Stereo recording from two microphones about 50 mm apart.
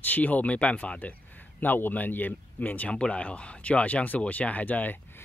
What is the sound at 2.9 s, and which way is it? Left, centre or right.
Speech, left.